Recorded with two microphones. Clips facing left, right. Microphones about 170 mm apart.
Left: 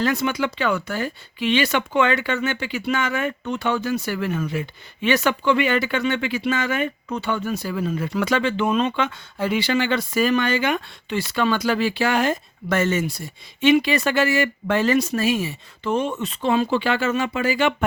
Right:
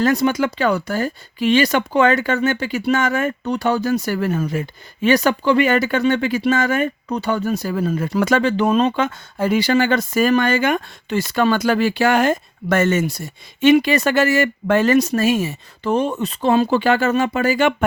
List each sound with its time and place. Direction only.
0.0 s speech: 40° right (ahead or behind)